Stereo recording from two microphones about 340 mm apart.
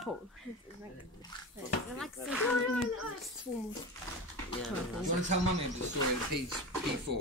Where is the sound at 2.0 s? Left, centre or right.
Centre.